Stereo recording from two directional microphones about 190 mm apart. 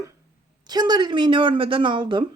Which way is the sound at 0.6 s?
20° right (ahead or behind).